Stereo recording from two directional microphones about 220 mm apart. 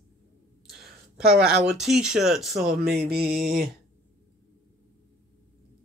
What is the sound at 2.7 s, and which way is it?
Speech, 45° right (ahead or behind).